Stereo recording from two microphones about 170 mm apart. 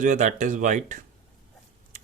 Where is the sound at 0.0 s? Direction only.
45° right (ahead or behind).